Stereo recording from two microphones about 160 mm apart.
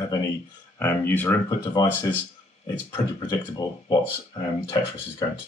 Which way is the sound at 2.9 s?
25° left (ahead or behind).